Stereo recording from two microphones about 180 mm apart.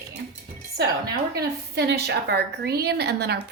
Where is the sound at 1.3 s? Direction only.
65° right (ahead or behind).